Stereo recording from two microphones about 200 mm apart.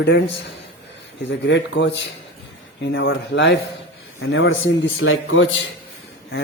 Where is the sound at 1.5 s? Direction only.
65° left (ahead or behind).